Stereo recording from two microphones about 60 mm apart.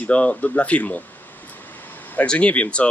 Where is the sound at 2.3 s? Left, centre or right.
Left.